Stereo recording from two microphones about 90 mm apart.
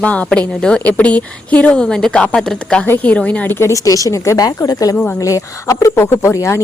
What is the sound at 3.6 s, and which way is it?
Speech, 35° left (ahead or behind).